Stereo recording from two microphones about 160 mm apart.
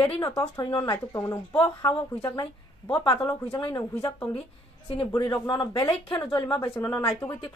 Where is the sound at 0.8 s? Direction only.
15° left (ahead or behind).